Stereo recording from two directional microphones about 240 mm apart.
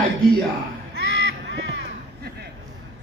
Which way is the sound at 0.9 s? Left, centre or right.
Right.